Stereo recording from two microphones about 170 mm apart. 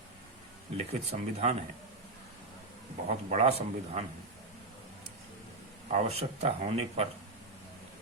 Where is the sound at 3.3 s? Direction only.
40° right (ahead or behind).